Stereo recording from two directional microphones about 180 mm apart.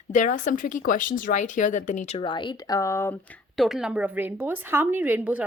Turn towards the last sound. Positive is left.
turn(degrees=-10)  # may be behind; listen again after turning